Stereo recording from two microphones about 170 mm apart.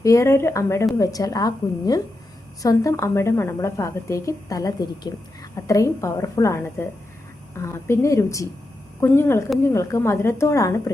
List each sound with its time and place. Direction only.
0.0 s a woman's voice: 20° left (ahead or behind)